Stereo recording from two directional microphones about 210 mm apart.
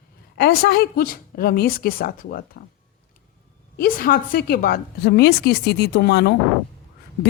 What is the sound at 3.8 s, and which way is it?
A woman's voice, 45° left (ahead or behind).